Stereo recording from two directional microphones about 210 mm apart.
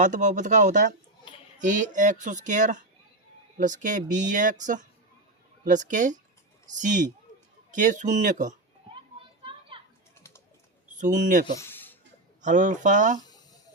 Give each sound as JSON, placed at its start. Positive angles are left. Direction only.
{"t": 0.0, "sound": "speech", "side_deg": -35}
{"t": 9.4, "sound": "children playing", "side_deg": -25}
{"t": 10.9, "sound": "speech", "side_deg": -35}
{"t": 11.6, "sound": "a sound", "side_deg": 10}
{"t": 12.4, "sound": "speech", "side_deg": -35}
{"t": 13.2, "sound": "a sound", "side_deg": 20}